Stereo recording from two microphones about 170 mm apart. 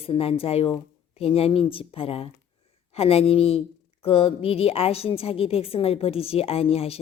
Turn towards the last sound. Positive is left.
turn(degrees=35)  # may be behind; listen again after turning